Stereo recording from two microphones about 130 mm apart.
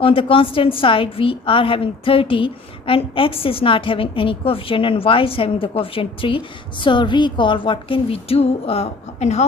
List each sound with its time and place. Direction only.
0.0 s a woman's voice: 45° left (ahead or behind); by 9.4 s 60° left (ahead or behind)